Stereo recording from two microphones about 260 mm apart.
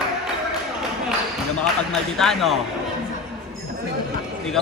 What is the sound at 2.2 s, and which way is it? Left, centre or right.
Speech, centre.